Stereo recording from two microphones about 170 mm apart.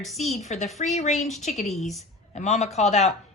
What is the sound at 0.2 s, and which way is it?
Speech, 40° left (ahead or behind).